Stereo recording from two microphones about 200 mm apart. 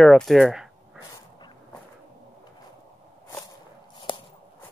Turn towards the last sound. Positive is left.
turn(degrees=25)  # may be behind; listen again after turning